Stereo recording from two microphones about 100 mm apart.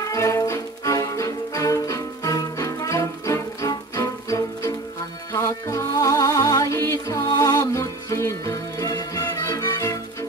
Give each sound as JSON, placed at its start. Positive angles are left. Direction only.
{"t": 0.0, "sound": "music", "side_deg": 30}